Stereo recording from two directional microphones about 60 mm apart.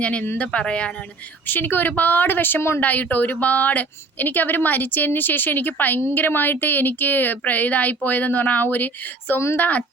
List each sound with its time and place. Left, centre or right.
0.0 s a woman's voice: left
1.5 s a woman's voice: left
2.8 s a woman's voice: left